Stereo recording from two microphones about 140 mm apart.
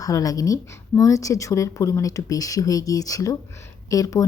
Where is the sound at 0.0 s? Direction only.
25° left (ahead or behind).